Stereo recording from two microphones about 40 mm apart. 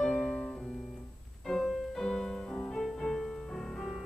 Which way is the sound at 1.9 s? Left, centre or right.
Centre.